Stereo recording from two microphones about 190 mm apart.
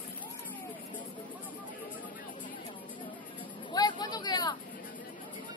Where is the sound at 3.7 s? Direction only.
20° left (ahead or behind).